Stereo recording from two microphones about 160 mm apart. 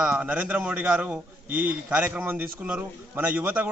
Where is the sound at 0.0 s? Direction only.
5° right (ahead or behind).